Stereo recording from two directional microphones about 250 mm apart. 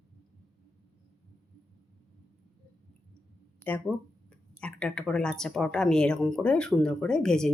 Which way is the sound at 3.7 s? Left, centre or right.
Centre.